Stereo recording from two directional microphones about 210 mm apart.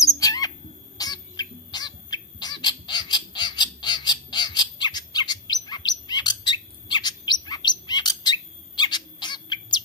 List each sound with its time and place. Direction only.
0.0 s bird: 15° left (ahead or behind)
7.4 s chirp: 20° left (ahead or behind)
7.8 s bird: 20° left (ahead or behind)